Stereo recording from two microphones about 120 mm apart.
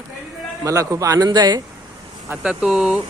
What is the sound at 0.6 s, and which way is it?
Speech, 25° right (ahead or behind).